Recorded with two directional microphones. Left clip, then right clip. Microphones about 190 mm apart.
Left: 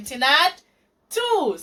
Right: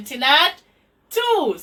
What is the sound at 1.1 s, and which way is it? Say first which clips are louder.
Speech: right 2 dB; centre (ahead or behind).